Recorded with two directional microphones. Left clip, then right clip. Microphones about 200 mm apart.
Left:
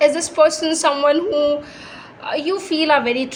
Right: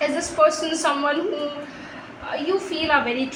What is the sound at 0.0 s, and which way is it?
A woman's voice, 60° left (ahead or behind).